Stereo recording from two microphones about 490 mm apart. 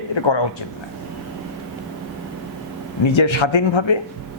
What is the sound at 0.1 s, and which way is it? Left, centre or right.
Speech, left.